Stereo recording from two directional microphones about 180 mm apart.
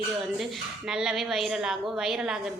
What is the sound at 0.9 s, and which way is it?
A woman's voice, 5° right (ahead or behind).